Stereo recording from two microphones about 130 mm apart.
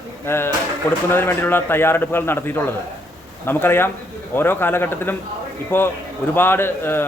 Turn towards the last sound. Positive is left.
turn(degrees=15)  # may be behind; listen again after turning